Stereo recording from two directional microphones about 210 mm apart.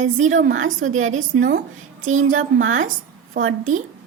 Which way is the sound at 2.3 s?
70° right (ahead or behind).